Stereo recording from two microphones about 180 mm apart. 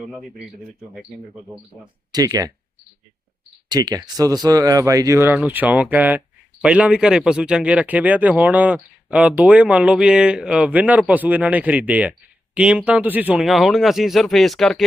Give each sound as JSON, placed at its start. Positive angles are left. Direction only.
{"t": 2.1, "sound": "speech", "side_deg": -20}
{"t": 3.7, "sound": "speech", "side_deg": -20}